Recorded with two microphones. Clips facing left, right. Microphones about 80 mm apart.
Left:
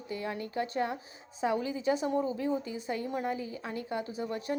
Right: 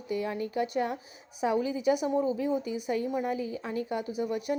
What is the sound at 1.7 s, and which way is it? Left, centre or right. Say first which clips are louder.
A woman's voice: right 3 dB; left.